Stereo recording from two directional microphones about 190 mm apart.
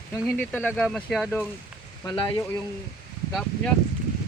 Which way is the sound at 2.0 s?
20° left (ahead or behind).